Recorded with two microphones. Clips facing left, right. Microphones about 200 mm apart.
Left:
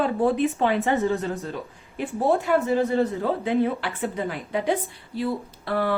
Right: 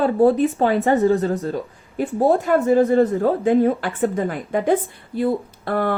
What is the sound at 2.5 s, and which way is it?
Speech, 45° right (ahead or behind).